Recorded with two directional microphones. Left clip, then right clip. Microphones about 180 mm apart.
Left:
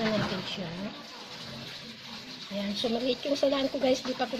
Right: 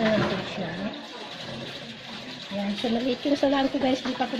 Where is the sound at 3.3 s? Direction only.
65° left (ahead or behind).